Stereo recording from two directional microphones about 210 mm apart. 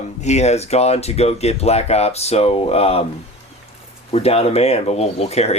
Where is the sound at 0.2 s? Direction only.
30° left (ahead or behind).